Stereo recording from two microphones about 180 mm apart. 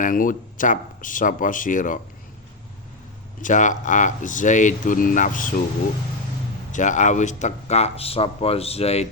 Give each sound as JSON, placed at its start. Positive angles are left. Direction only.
{"t": 0.0, "sound": "speech", "side_deg": 50}
{"t": 3.4, "sound": "speech", "side_deg": 45}
{"t": 6.7, "sound": "speech", "side_deg": 45}